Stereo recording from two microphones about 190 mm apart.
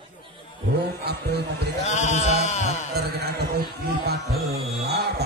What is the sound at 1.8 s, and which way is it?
Sheep, 35° left (ahead or behind).